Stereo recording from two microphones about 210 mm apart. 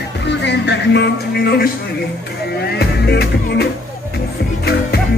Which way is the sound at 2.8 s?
50° left (ahead or behind).